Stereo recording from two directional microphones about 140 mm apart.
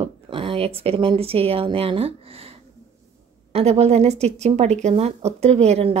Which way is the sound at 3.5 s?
50° right (ahead or behind).